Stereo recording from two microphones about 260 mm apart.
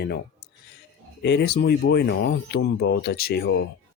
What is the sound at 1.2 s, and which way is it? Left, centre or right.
Speech, left.